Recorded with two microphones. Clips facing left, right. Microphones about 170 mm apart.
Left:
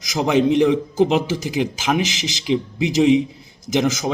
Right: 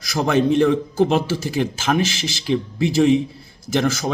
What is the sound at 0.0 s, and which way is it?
Speech, 20° left (ahead or behind).